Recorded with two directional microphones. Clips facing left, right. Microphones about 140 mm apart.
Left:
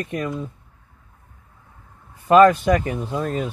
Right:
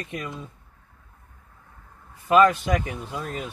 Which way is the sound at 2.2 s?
50° left (ahead or behind).